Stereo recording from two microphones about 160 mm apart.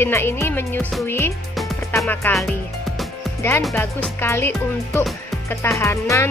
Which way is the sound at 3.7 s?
15° left (ahead or behind).